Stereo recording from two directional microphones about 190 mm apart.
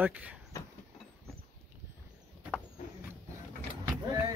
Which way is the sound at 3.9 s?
15° right (ahead or behind).